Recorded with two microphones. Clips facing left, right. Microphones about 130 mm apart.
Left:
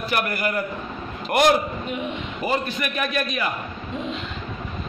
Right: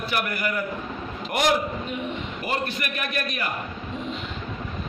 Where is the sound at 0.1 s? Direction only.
40° left (ahead or behind).